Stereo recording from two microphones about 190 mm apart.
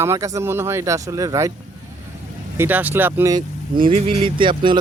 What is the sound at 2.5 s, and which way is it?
Speech, 10° right (ahead or behind).